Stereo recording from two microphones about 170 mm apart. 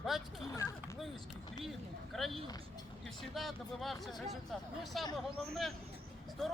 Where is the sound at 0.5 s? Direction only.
20° left (ahead or behind).